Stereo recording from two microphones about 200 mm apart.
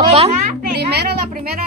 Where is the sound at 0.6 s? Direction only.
55° right (ahead or behind).